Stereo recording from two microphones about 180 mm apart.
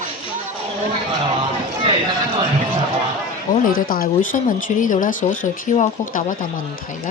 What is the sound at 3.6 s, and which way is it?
Speech, 50° left (ahead or behind).